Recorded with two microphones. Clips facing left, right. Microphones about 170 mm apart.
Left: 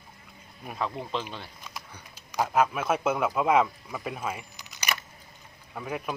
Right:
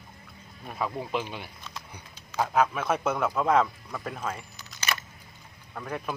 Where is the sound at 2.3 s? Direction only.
10° left (ahead or behind).